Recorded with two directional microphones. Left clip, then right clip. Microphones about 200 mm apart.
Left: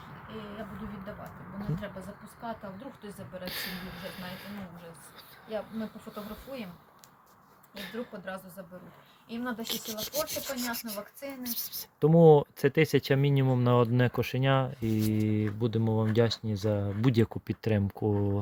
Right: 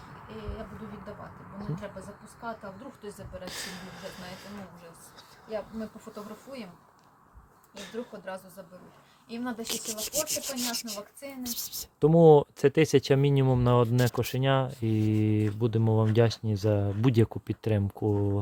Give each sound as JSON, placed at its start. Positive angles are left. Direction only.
{"t": 2.4, "sound": "speech", "side_deg": 0}
{"t": 7.8, "sound": "speech", "side_deg": 0}
{"t": 9.6, "sound": "speech", "side_deg": -15}